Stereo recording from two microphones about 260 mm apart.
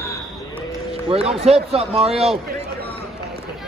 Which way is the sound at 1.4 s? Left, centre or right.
Right.